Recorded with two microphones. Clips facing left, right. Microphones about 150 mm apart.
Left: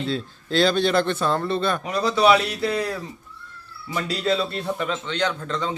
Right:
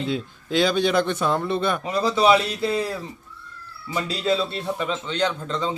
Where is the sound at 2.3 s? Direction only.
25° right (ahead or behind).